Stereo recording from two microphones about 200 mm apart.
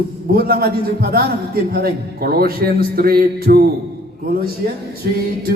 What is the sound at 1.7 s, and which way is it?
A man's voice, 50° right (ahead or behind).